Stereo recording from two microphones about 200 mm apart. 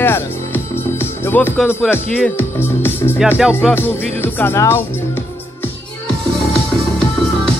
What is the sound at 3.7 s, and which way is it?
Speech, 10° left (ahead or behind).